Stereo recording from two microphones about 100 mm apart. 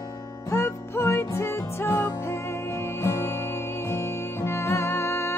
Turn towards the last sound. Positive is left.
turn(degrees=25)  # may be behind; listen again after turning